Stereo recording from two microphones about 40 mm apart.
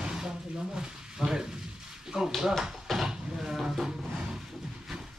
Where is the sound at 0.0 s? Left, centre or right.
Centre.